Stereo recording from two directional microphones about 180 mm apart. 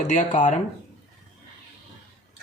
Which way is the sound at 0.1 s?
45° left (ahead or behind).